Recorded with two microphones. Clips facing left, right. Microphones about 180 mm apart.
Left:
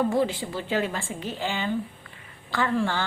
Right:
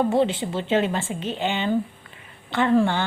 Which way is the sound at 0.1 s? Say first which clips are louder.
Right 4 dB; 25° right (ahead or behind).